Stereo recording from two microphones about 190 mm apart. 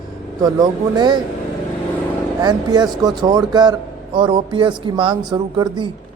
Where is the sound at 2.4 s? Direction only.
20° right (ahead or behind).